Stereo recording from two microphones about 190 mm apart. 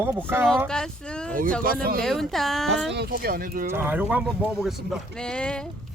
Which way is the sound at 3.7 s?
10° right (ahead or behind).